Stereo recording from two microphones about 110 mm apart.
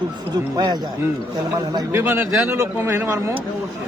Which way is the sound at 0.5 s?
35° right (ahead or behind).